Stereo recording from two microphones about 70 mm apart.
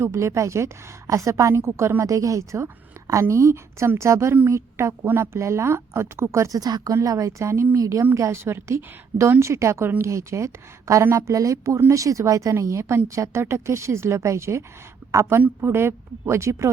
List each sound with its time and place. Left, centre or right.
0.0 s a woman's voice: right
2.0 s a woman's voice: right
6.5 s a woman's voice: right
6.9 s a woman's voice: right
15.4 s speech: right